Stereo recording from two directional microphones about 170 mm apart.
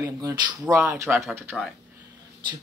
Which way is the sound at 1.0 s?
Centre (ahead or behind).